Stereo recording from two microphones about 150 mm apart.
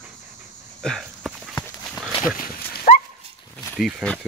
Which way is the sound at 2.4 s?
75° left (ahead or behind).